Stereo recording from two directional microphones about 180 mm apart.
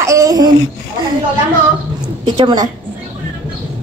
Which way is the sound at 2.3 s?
25° right (ahead or behind).